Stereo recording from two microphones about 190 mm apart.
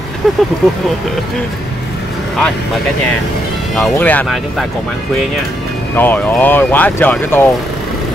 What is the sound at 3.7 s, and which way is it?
Speech, 5° left (ahead or behind).